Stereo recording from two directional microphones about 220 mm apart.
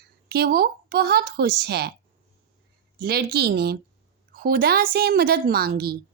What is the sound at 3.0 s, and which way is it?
Speech, 45° right (ahead or behind).